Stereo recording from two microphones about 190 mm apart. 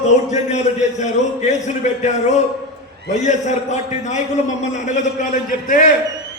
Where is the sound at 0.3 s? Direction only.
40° left (ahead or behind).